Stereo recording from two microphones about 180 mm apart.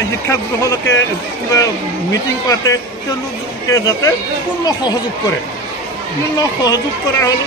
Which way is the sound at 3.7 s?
20° left (ahead or behind).